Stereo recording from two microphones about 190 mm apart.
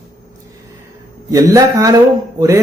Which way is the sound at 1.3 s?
15° right (ahead or behind).